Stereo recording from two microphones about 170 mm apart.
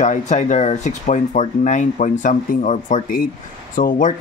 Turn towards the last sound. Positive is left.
turn(degrees=50)  # may be behind; listen again after turning